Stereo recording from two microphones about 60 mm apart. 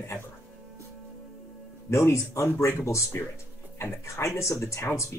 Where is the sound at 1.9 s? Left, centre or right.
Left.